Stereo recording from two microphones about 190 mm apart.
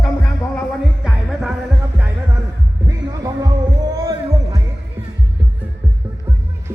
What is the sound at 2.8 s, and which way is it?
Music, 20° right (ahead or behind).